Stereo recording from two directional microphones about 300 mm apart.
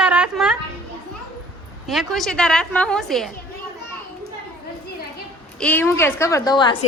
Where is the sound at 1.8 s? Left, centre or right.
Centre.